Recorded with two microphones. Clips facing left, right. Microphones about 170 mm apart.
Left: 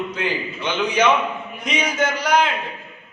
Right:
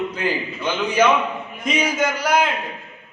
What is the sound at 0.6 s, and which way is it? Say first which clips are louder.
A man's voice: right 1 dB; 10° right (ahead or behind).